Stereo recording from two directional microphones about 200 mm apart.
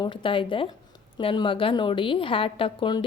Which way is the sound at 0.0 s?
25° left (ahead or behind).